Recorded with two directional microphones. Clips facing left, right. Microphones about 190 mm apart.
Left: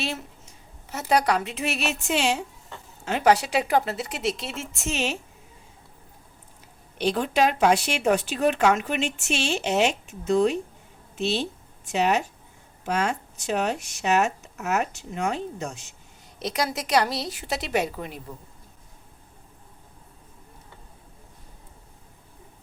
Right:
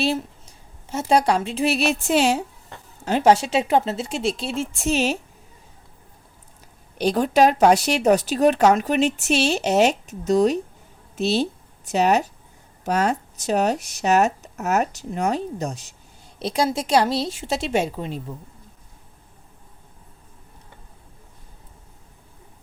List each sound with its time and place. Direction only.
0.0 s a woman's voice: 30° right (ahead or behind)
7.0 s speech: 40° right (ahead or behind)